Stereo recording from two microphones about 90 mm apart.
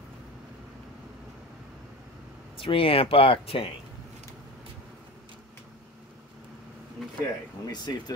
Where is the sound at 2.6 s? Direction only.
90° left.